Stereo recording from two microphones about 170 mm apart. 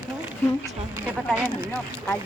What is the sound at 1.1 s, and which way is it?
Speech, 5° right (ahead or behind).